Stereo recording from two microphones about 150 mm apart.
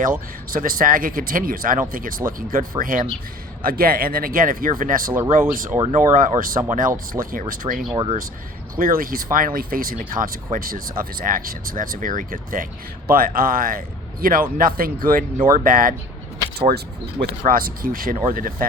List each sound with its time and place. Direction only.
0.5 s speech: 70° right (ahead or behind)
7.1 s speech: 70° right (ahead or behind)
7.9 s speech: 40° right (ahead or behind)
8.7 s speech: 70° right (ahead or behind)
16.6 s speech: 90° right
17.4 s speech: 70° right (ahead or behind)